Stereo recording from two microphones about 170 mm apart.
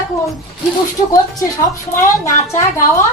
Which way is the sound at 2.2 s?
15° left (ahead or behind).